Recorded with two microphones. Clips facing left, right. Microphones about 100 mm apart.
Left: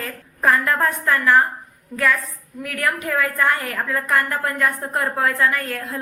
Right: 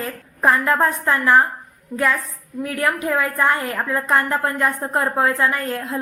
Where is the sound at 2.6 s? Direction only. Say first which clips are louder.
Right 2 dB; 25° right (ahead or behind).